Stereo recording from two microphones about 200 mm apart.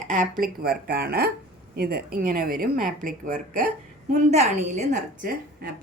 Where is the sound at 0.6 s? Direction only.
50° right (ahead or behind).